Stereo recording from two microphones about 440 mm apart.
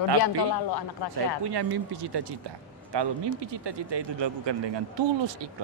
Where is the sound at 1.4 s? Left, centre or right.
Right.